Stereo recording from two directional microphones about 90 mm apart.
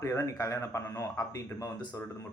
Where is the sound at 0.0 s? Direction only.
35° left (ahead or behind).